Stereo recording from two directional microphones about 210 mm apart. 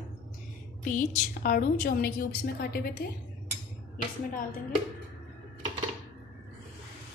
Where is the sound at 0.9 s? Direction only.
40° left (ahead or behind).